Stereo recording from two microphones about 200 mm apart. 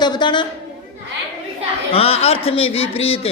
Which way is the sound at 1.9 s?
30° left (ahead or behind).